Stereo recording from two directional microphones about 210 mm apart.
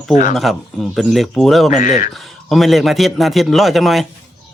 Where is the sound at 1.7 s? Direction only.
40° left (ahead or behind).